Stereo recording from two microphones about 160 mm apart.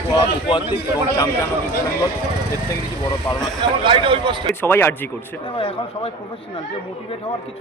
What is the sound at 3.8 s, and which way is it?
Speech, 30° right (ahead or behind).